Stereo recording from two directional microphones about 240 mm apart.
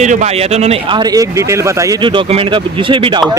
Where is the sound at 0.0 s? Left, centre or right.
Right.